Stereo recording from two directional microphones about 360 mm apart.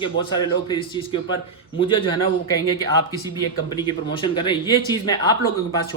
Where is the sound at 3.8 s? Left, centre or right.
Centre.